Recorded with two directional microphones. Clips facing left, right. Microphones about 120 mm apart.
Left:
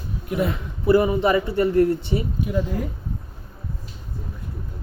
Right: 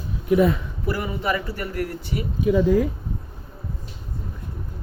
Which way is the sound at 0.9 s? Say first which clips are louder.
Left 8 dB; 25° left (ahead or behind).